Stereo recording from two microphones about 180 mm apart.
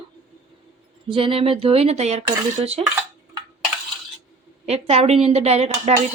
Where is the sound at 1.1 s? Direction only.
30° right (ahead or behind).